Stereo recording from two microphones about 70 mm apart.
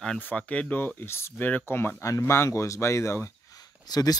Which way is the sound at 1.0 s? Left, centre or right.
Left.